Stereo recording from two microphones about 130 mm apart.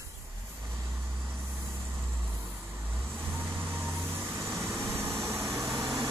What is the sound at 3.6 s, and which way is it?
Vehicle, 15° right (ahead or behind).